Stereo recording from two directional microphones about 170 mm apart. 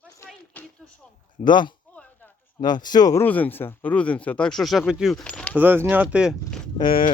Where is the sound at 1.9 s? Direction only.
10° left (ahead or behind).